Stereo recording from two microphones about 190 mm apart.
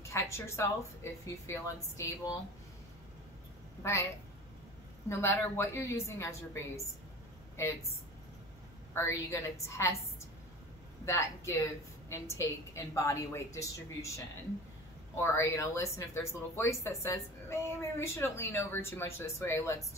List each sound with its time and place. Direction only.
0.1 s speech: 15° left (ahead or behind)
3.8 s speech: 15° left (ahead or behind)
5.1 s speech: 15° left (ahead or behind)
8.9 s speech: 15° left (ahead or behind)
11.1 s speech: 15° left (ahead or behind)